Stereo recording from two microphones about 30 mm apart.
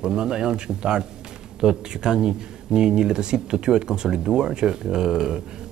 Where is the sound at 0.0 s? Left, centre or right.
Right.